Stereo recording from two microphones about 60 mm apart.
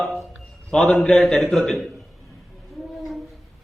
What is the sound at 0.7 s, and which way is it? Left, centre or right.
A man's voice, centre.